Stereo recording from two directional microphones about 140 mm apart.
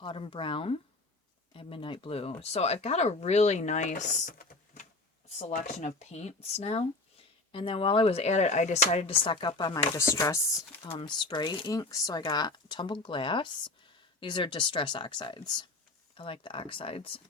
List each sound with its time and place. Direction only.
0.0 s speech: 40° left (ahead or behind)
10.0 s chopping: 20° left (ahead or behind)
10.9 s speech: 35° left (ahead or behind)